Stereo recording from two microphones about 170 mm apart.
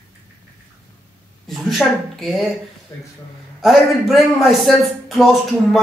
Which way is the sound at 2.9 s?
20° left (ahead or behind).